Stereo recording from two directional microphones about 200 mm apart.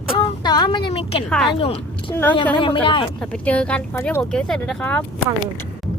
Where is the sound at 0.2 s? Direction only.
25° left (ahead or behind).